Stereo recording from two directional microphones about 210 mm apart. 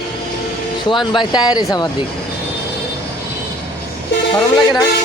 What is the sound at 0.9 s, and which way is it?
Speech, 20° left (ahead or behind).